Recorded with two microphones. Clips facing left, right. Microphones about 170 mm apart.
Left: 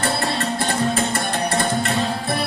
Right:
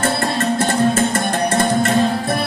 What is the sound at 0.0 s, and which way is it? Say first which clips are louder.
Music: right 4 dB; 45° right (ahead or behind).